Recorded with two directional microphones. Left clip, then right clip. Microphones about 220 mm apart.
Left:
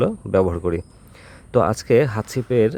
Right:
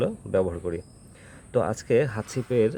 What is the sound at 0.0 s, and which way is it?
Speech, 15° left (ahead or behind).